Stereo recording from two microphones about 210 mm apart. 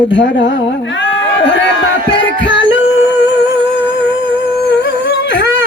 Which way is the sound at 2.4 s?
60° left (ahead or behind).